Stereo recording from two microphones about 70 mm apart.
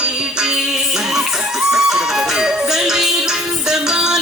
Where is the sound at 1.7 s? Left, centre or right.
Centre.